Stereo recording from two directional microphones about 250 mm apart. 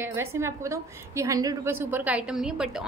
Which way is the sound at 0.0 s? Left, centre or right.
Centre.